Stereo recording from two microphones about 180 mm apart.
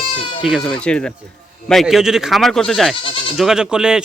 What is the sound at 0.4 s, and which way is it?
Speech, centre (ahead or behind).